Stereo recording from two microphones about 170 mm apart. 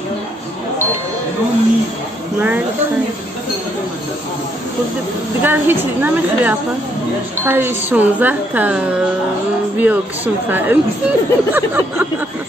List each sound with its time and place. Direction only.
5.4 s speech: 10° right (ahead or behind)